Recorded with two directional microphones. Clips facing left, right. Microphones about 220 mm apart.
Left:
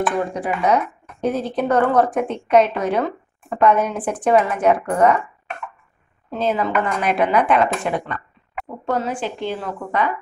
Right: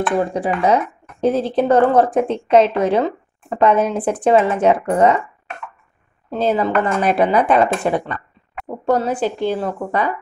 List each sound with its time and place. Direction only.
0.6 s speech: 30° right (ahead or behind)
6.3 s a woman's voice: 35° right (ahead or behind)